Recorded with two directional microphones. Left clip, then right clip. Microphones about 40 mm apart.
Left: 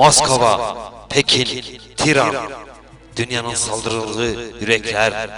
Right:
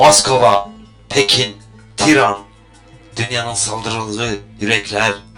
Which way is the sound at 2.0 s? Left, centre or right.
Left.